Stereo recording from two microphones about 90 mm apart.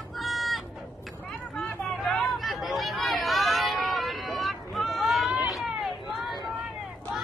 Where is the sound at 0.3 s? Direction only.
Centre (ahead or behind).